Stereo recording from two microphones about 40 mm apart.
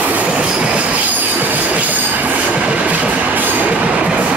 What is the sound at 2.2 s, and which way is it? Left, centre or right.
Train, right.